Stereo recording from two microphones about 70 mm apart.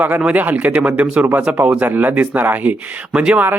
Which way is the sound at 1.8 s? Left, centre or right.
Right.